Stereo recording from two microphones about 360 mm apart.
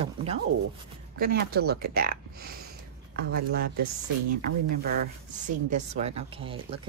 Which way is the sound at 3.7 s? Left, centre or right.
Right.